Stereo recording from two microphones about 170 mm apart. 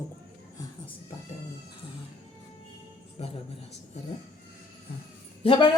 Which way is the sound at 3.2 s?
35° left (ahead or behind).